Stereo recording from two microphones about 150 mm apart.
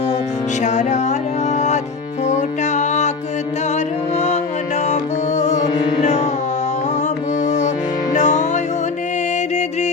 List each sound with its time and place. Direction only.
0.6 s music: 50° left (ahead or behind)
4.9 s music: 50° left (ahead or behind)
7.4 s music: 50° left (ahead or behind)